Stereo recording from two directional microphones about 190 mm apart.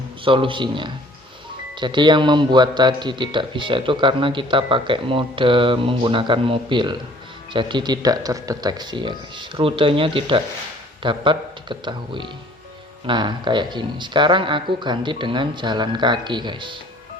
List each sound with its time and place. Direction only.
0.3 s speech: 25° right (ahead or behind)